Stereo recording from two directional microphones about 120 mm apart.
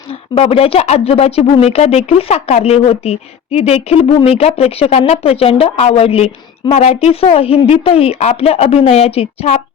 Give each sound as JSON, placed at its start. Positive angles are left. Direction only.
{"t": 0.1, "sound": "speech", "side_deg": 55}